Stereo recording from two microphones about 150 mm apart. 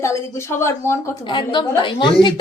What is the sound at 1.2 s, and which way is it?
A woman's voice, 30° left (ahead or behind).